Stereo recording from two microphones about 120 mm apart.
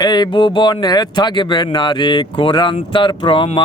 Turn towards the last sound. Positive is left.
turn(degrees=45)  # may be behind; listen again after turning